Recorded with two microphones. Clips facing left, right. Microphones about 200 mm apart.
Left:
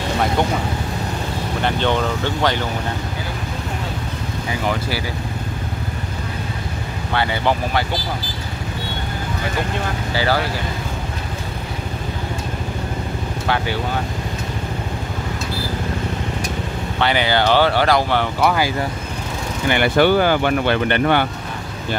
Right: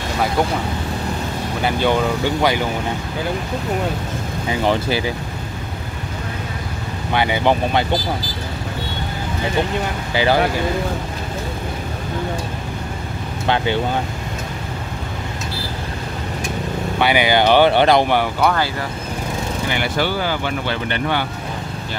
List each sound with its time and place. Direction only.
1.6 s speech: 5° right (ahead or behind)
4.6 s speech: 20° right (ahead or behind)
7.1 s speech: 15° right (ahead or behind)
10.1 s speech: 20° right (ahead or behind)
17.0 s speech: 10° right (ahead or behind)
18.4 s speech: 10° left (ahead or behind)
19.7 s speech: 55° left (ahead or behind)